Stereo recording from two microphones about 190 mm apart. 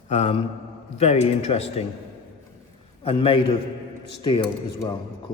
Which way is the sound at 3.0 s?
30° left (ahead or behind).